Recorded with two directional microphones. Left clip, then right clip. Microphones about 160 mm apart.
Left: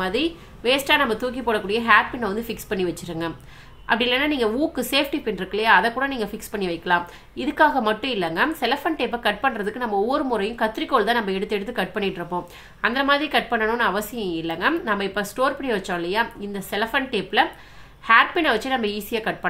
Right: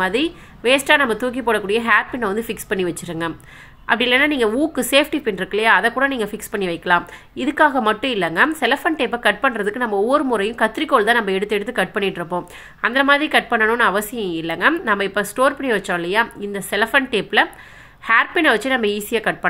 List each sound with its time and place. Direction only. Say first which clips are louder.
0.0 s a woman's voice: right 4 dB; 30° right (ahead or behind)